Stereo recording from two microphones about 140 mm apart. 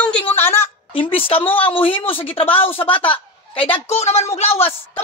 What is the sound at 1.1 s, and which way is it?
A man's voice, 40° left (ahead or behind).